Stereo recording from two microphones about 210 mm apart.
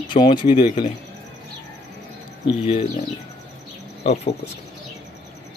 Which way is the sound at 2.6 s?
30° left (ahead or behind).